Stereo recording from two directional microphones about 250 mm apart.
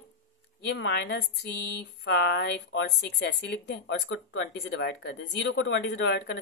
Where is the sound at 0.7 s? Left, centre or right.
Left.